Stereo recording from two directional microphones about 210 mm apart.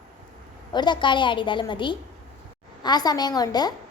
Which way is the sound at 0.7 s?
20° left (ahead or behind).